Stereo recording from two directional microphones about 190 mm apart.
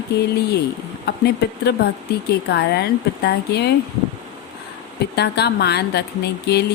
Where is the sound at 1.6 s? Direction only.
60° left (ahead or behind).